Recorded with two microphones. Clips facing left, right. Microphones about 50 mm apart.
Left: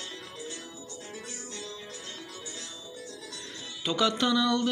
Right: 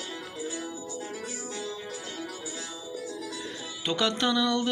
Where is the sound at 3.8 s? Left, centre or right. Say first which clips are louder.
Even; right.